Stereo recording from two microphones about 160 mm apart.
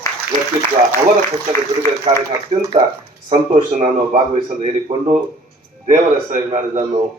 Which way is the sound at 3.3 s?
45° right (ahead or behind).